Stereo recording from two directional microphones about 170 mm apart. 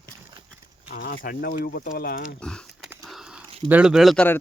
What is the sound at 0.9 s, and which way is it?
Speech, 70° left (ahead or behind).